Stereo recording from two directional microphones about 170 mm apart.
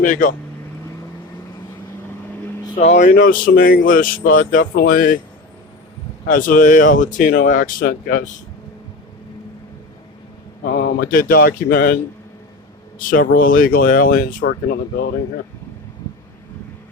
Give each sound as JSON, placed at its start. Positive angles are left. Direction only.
{"t": 0.0, "sound": "speech", "side_deg": 50}
{"t": 2.7, "sound": "speech", "side_deg": 40}
{"t": 6.2, "sound": "speech", "side_deg": 55}
{"t": 10.7, "sound": "speech", "side_deg": 65}
{"t": 13.0, "sound": "speech", "side_deg": 55}